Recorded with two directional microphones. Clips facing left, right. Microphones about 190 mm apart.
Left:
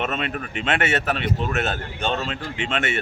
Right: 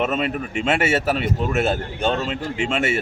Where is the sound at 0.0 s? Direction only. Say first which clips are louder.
Right 4 dB; 5° right (ahead or behind).